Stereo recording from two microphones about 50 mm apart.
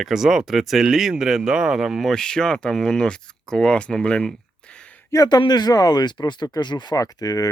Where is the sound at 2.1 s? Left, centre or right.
Centre.